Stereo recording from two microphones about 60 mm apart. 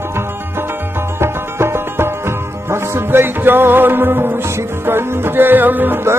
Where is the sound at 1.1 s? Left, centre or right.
Right.